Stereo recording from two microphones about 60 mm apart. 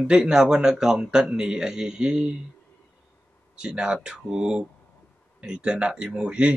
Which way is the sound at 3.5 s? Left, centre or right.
Centre.